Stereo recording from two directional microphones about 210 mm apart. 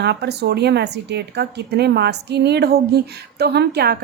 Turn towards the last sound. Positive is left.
turn(degrees=-50)  # may be behind; listen again after turning